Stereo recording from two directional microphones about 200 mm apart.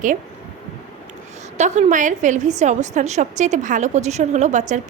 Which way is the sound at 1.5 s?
35° right (ahead or behind).